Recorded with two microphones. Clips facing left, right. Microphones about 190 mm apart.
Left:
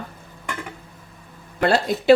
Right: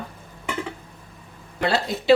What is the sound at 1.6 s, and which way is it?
Speech, 50° left (ahead or behind).